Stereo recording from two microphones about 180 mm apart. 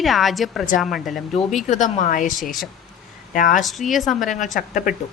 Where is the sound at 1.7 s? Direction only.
45° left (ahead or behind).